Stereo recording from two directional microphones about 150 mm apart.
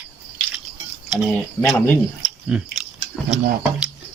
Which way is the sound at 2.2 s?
5° right (ahead or behind).